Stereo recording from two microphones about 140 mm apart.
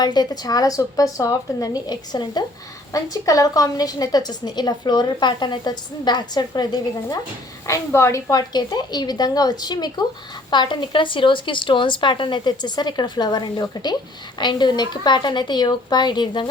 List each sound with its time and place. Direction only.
0.0 s a woman's voice: 30° left (ahead or behind)